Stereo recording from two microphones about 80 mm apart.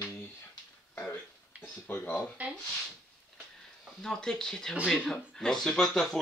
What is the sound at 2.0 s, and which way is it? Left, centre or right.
Speech, centre.